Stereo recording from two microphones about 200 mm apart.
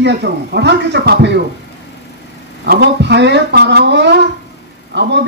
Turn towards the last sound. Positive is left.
turn(degrees=-60)  # may be behind; listen again after turning